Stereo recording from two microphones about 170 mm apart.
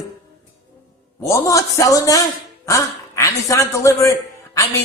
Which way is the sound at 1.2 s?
20° left (ahead or behind).